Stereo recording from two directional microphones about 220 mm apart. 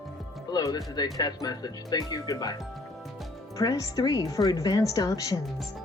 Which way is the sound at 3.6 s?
15° left (ahead or behind).